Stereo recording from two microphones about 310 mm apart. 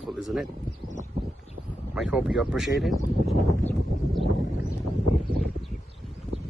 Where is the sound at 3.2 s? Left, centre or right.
Centre.